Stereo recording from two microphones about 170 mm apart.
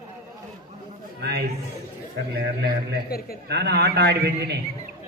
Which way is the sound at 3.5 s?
80° right.